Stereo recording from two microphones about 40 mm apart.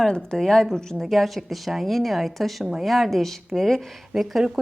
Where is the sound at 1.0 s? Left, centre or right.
Centre.